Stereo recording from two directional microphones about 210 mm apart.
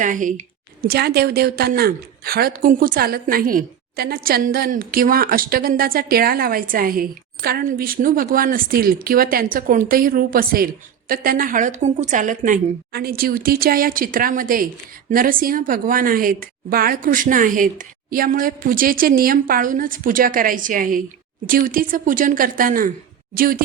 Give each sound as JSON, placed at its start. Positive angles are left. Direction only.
{"t": 0.0, "sound": "a woman's voice", "side_deg": -40}